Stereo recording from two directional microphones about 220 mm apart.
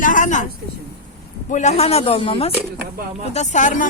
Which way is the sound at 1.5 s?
30° left (ahead or behind).